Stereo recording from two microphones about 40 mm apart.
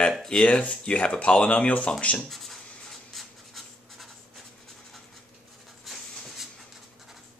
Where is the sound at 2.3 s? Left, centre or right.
Centre.